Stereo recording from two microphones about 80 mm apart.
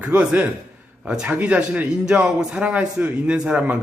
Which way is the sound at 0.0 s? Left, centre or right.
Centre.